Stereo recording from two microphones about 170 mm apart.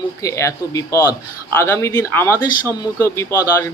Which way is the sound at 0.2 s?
20° left (ahead or behind).